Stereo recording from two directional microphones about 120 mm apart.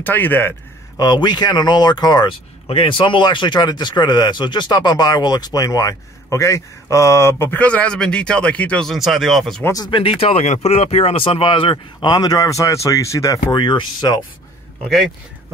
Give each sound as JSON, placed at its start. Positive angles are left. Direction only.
{"t": 0.0, "sound": "a man's voice", "side_deg": 15}
{"t": 0.9, "sound": "speech", "side_deg": 35}
{"t": 8.9, "sound": "speech", "side_deg": 0}
{"t": 9.8, "sound": "speech", "side_deg": 45}
{"t": 10.2, "sound": "speech", "side_deg": 55}
{"t": 13.5, "sound": "speech", "side_deg": 40}
{"t": 14.8, "sound": "speech", "side_deg": 5}